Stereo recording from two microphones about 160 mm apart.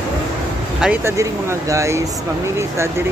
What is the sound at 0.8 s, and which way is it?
Speech, 15° right (ahead or behind).